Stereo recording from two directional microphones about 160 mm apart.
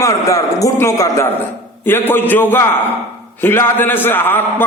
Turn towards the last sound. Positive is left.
turn(degrees=15)  # may be behind; listen again after turning